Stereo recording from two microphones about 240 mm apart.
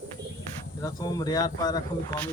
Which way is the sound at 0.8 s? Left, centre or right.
Centre.